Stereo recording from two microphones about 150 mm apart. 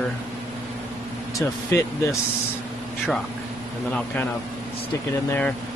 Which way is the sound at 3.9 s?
10° left (ahead or behind).